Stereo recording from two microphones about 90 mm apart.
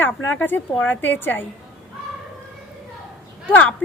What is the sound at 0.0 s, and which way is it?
A woman's voice, 20° left (ahead or behind).